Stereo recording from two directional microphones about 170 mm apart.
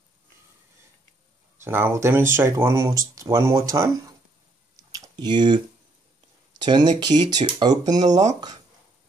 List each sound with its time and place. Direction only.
1.6 s speech: 15° right (ahead or behind)
4.9 s chewing: 25° right (ahead or behind)
6.6 s speech: 25° right (ahead or behind)